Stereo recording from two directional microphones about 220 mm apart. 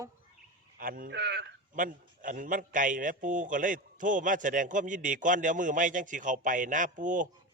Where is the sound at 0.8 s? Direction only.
40° right (ahead or behind).